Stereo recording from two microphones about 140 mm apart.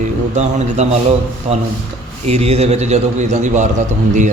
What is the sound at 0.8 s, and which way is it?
A man's voice, 55° right (ahead or behind).